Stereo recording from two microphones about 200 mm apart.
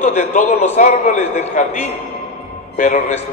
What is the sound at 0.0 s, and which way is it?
A man's voice, 35° left (ahead or behind).